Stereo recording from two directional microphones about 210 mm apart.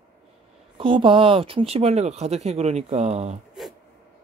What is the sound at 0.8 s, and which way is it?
Speech, 25° right (ahead or behind).